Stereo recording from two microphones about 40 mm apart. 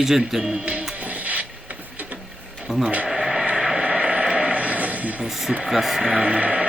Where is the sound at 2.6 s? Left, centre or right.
Centre.